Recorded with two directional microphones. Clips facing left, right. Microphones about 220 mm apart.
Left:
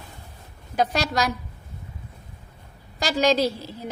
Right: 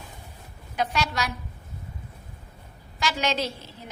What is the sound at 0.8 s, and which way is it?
Speech, 40° left (ahead or behind).